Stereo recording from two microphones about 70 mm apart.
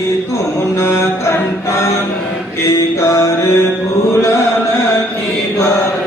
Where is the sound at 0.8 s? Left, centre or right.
Left.